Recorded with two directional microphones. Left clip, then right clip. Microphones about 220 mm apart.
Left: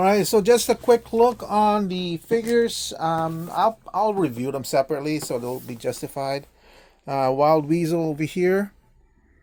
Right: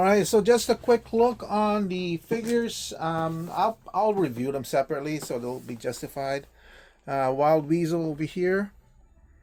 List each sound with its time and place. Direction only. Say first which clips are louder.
0.0 s speech: left 2 dB; 25° left (ahead or behind)